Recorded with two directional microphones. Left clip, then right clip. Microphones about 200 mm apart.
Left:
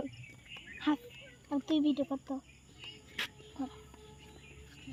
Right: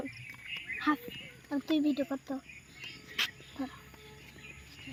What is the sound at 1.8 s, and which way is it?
Speech, 40° right (ahead or behind).